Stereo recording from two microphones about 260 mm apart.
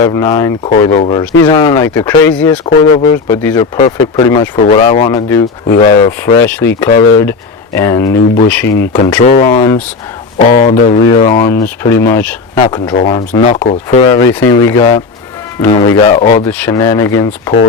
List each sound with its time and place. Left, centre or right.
0.0 s speech: centre
5.6 s speech: left
6.1 s speech: centre
16.3 s speech: centre